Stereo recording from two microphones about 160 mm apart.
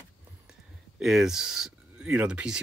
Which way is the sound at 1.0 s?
Centre (ahead or behind).